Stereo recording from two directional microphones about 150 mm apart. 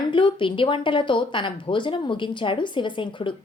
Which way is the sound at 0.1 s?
35° left (ahead or behind).